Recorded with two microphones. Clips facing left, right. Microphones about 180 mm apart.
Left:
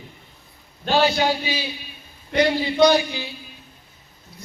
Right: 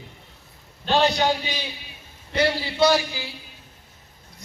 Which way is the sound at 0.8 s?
5° left (ahead or behind).